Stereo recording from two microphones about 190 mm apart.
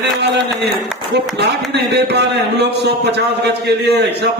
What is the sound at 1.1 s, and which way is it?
A man's voice, 60° right (ahead or behind).